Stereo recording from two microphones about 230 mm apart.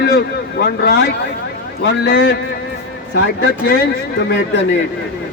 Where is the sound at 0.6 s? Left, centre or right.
Left.